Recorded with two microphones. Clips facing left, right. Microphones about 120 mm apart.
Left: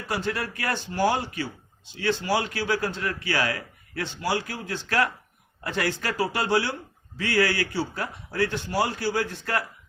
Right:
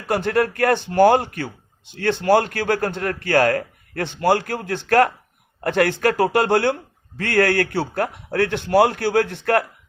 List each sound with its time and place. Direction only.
0.1 s speech: 55° right (ahead or behind)